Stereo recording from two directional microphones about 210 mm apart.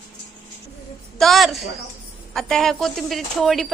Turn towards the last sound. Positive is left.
turn(degrees=0)  # may be behind; listen again after turning